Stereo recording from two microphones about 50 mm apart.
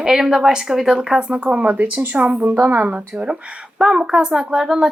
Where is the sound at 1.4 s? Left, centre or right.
Right.